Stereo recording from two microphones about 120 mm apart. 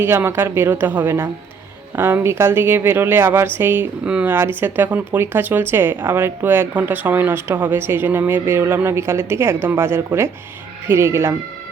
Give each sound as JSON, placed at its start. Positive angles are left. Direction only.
{"t": 0.0, "sound": "speech", "side_deg": -20}